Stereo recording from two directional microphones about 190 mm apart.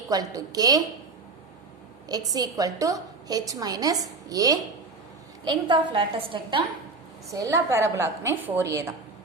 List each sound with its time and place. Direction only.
0.1 s a woman's voice: 20° right (ahead or behind)
2.0 s a woman's voice: 20° right (ahead or behind)
7.3 s a woman's voice: 15° right (ahead or behind)